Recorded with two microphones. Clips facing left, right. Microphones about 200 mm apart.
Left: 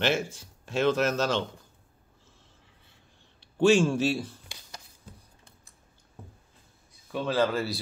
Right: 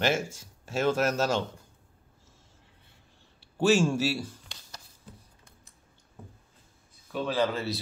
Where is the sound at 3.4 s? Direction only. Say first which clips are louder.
Left 3 dB; 5° right (ahead or behind).